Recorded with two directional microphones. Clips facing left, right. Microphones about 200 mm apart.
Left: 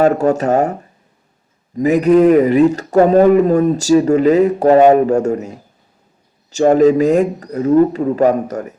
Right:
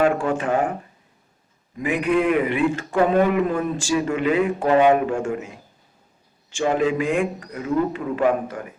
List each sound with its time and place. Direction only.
0.0 s a man's voice: 40° left (ahead or behind)